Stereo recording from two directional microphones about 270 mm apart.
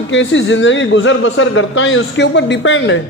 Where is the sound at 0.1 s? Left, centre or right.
Left.